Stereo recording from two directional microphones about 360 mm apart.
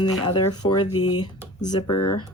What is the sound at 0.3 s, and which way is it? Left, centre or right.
Speech, centre.